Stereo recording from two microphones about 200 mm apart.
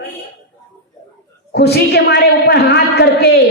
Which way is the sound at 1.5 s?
55° left (ahead or behind).